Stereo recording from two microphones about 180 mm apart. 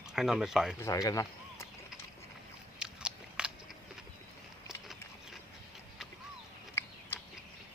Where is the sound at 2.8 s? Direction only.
5° right (ahead or behind).